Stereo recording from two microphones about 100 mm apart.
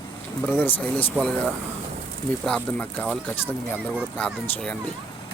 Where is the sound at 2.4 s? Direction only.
15° left (ahead or behind).